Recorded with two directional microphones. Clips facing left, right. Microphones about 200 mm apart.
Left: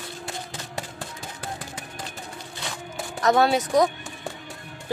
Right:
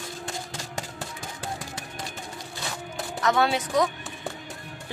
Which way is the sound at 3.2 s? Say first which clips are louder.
Left 4 dB; 40° left (ahead or behind).